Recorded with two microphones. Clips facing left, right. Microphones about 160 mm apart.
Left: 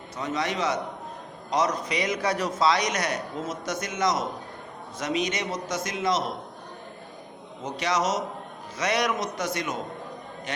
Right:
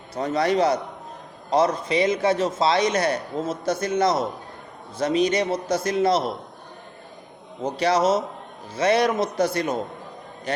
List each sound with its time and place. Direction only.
0.1 s a man's voice: 35° right (ahead or behind)
7.6 s a man's voice: 35° right (ahead or behind)